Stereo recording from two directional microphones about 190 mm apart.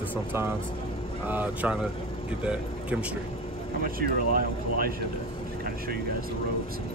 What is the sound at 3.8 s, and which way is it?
Speech, 50° right (ahead or behind).